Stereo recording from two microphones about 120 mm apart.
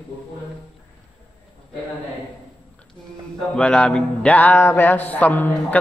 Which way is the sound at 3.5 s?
10° left (ahead or behind).